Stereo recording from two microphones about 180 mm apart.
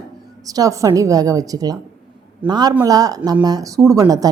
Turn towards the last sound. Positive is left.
turn(degrees=-20)  # may be behind; listen again after turning